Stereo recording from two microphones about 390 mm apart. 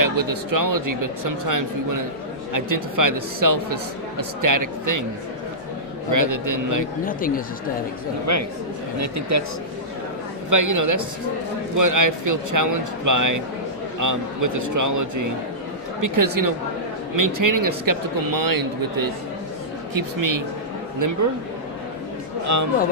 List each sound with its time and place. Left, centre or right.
0.0 s speech: right
6.1 s speech: right
7.0 s speech: left
8.3 s speech: right
10.5 s speech: right
22.4 s speech: right